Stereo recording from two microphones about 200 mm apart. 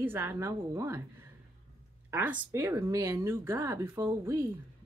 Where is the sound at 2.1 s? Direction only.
10° right (ahead or behind).